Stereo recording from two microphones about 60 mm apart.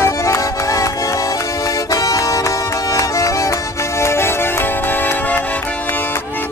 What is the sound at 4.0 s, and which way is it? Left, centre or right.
Music, left.